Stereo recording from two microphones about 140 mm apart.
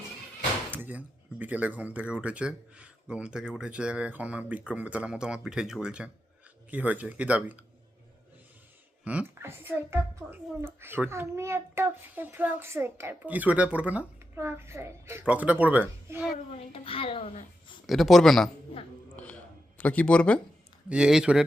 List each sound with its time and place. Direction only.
0.7 s a child's voice: 15° right (ahead or behind)
9.0 s a child's voice: 15° right (ahead or behind)
16.7 s a child's voice: 40° left (ahead or behind)
17.8 s speech: centre (ahead or behind)
19.1 s a sound: 10° left (ahead or behind)
19.8 s speech: 10° left (ahead or behind)
20.9 s speech: 5° right (ahead or behind)